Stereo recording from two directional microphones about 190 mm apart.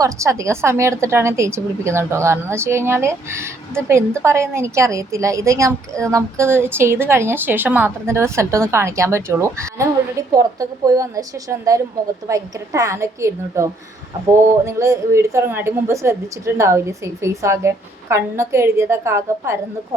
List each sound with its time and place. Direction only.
0.0 s a woman's voice: 15° right (ahead or behind)